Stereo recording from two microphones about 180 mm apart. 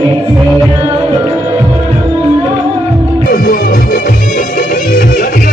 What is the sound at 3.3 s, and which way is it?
Music, 50° left (ahead or behind).